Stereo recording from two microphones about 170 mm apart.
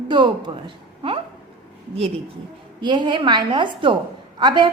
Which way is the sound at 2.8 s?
30° right (ahead or behind).